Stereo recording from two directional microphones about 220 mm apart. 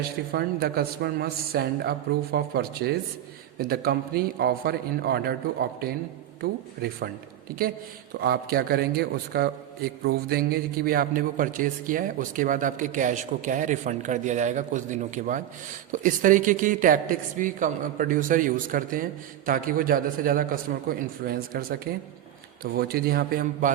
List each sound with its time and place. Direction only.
0.3 s speech: 45° right (ahead or behind)
8.2 s a man's voice: 45° right (ahead or behind)